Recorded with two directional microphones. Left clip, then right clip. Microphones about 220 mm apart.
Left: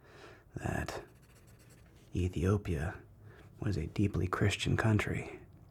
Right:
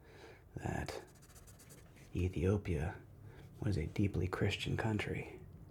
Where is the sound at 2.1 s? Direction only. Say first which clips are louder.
Left 2 dB; 30° left (ahead or behind).